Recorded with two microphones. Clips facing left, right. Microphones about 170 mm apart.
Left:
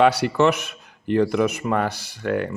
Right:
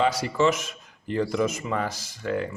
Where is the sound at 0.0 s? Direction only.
65° left (ahead or behind).